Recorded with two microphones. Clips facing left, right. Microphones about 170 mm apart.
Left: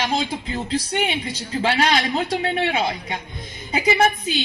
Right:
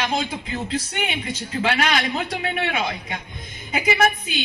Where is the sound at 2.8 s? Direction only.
30° left (ahead or behind).